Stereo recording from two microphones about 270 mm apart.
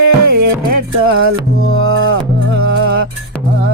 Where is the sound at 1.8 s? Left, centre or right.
Right.